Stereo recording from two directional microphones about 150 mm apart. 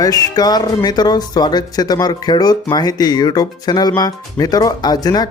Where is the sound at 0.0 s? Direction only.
25° left (ahead or behind).